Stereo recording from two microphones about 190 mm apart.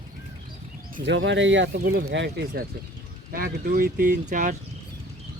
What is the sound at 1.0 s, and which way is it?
Speech, 70° right (ahead or behind).